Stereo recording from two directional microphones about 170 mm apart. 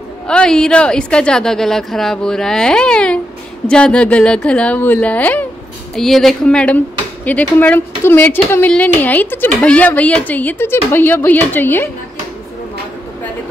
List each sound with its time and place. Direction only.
0.3 s a woman's voice: 5° left (ahead or behind)